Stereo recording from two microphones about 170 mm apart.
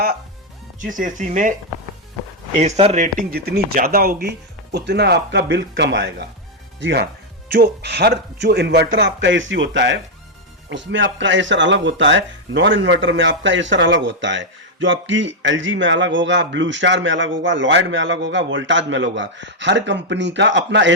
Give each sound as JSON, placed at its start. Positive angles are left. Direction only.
{"t": 0.9, "sound": "speech", "side_deg": -50}
{"t": 2.6, "sound": "speech", "side_deg": -40}
{"t": 7.4, "sound": "speech", "side_deg": -65}